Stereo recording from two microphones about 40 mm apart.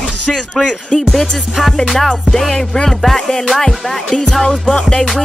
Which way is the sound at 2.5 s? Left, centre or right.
Centre.